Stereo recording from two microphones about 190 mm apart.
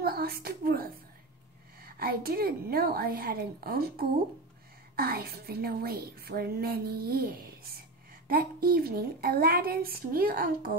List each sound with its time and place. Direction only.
0.0 s a woman's voice: 55° right (ahead or behind)